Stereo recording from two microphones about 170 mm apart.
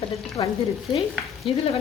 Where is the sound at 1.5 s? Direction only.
30° left (ahead or behind).